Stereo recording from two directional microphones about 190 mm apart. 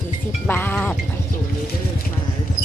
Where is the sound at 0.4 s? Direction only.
10° left (ahead or behind).